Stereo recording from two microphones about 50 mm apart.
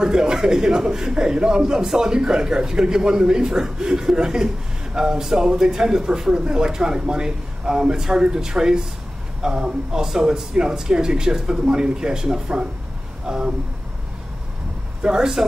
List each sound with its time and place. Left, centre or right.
0.0 s a man's voice: centre
15.0 s speech: centre